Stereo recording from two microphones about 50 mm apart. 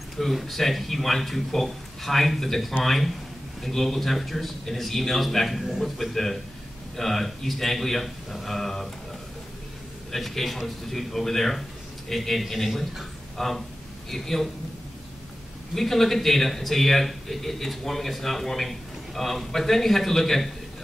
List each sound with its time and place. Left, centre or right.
0.2 s a man's voice: centre
10.1 s a man's voice: centre
15.7 s a man's voice: centre